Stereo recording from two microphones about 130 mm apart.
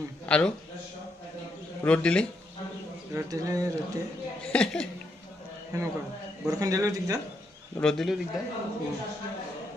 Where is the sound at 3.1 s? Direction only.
25° right (ahead or behind).